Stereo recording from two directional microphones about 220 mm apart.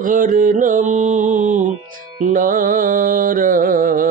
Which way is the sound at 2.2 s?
35° right (ahead or behind).